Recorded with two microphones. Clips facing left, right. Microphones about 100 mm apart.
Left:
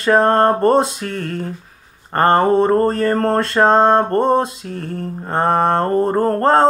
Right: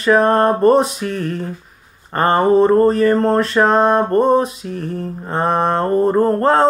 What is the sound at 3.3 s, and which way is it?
Speech, 35° left (ahead or behind).